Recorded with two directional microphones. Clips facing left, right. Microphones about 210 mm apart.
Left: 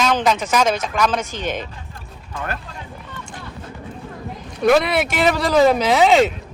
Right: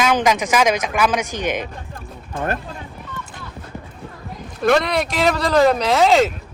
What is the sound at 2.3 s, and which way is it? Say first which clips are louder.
Speech: right 5 dB; 50° right (ahead or behind).